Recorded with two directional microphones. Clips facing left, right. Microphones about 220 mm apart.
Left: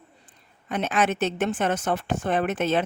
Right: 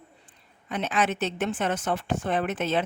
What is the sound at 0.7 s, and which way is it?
A woman's voice, 45° left (ahead or behind).